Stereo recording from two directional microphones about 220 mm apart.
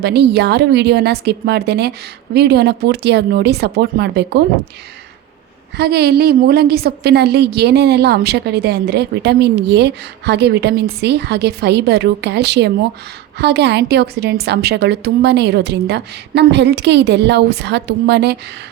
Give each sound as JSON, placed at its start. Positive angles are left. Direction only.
{"t": 0.0, "sound": "a woman's voice", "side_deg": -50}
{"t": 5.7, "sound": "a woman's voice", "side_deg": -45}